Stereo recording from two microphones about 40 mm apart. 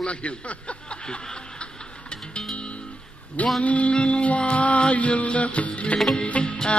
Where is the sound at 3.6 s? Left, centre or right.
Left.